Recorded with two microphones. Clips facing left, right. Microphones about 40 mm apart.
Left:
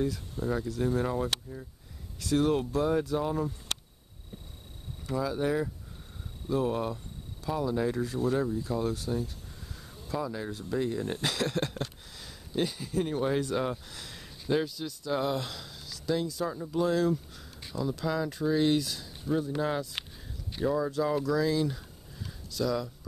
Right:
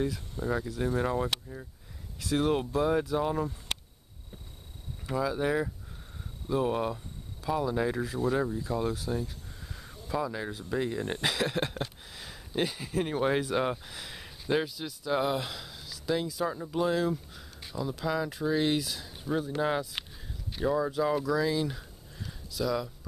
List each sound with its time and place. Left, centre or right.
0.0 s speech: centre
5.0 s speech: centre
9.8 s a sound: centre
10.5 s speech: centre
10.8 s speech: right
11.2 s speech: centre
13.0 s speech: right
13.8 s speech: centre